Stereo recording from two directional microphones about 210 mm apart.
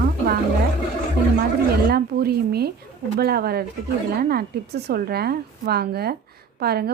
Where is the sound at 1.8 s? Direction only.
50° right (ahead or behind).